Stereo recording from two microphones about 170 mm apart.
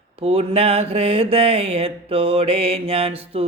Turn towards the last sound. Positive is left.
turn(degrees=-35)  # may be behind; listen again after turning